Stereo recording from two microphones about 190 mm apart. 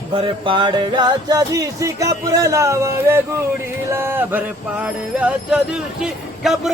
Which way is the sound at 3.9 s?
10° right (ahead or behind).